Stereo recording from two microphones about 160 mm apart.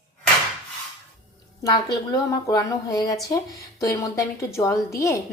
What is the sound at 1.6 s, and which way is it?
A woman's voice, 25° left (ahead or behind).